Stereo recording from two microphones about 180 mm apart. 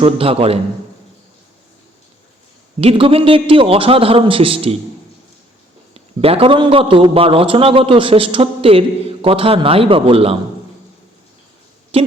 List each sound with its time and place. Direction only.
0.0 s a man's voice: 30° right (ahead or behind)
2.8 s a man's voice: 30° right (ahead or behind)
5.9 s a man's voice: 30° right (ahead or behind)